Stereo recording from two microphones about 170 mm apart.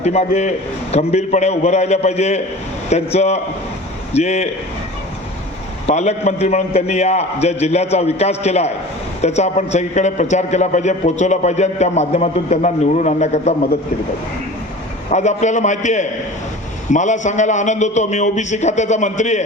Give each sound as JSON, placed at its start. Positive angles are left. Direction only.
{"t": 0.0, "sound": "a man's voice", "side_deg": 40}
{"t": 5.8, "sound": "a man's voice", "side_deg": 40}
{"t": 15.1, "sound": "a man's voice", "side_deg": 45}